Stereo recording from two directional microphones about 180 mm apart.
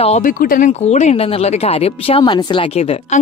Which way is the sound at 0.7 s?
40° left (ahead or behind).